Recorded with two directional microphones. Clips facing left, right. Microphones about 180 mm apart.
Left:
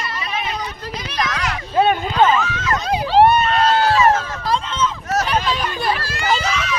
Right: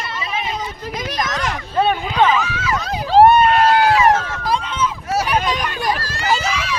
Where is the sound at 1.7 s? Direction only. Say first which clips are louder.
Left 2 dB; 5° left (ahead or behind).